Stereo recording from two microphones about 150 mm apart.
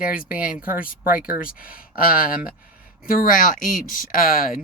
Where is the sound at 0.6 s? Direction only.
70° left (ahead or behind).